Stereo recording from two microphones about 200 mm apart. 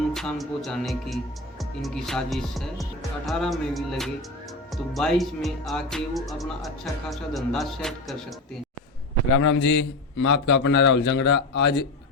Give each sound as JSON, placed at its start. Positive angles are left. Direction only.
{"t": 0.1, "sound": "speech", "side_deg": 0}
{"t": 9.6, "sound": "a man's voice", "side_deg": 65}